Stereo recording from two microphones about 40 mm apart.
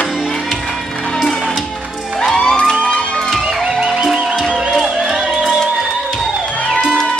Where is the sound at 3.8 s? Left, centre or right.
Right.